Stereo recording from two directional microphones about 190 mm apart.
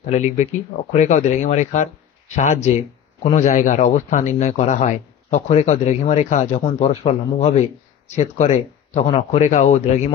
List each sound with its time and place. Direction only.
0.0 s speech: 40° left (ahead or behind)